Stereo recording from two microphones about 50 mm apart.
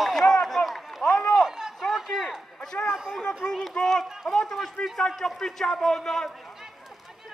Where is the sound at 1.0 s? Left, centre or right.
Left.